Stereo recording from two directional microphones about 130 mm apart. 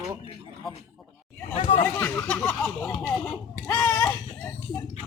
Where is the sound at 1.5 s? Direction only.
45° left (ahead or behind).